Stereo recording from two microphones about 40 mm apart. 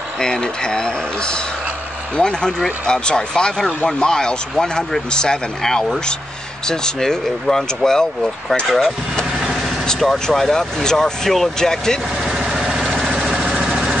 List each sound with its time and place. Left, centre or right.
0.2 s speech: centre
9.5 s vehicle: centre
10.3 s speech: centre
12.3 s vehicle: centre